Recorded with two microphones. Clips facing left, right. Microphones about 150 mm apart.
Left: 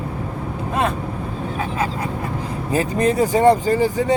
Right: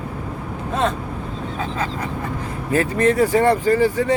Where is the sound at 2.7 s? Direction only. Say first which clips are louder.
Right 1 dB; 15° left (ahead or behind).